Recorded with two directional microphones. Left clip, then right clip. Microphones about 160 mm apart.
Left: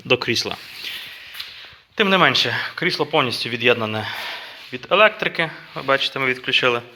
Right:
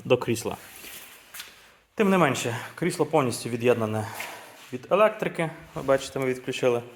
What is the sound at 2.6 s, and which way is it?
Speech, 10° right (ahead or behind).